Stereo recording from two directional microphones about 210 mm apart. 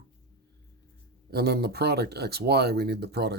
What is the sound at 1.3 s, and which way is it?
Speech, 50° right (ahead or behind).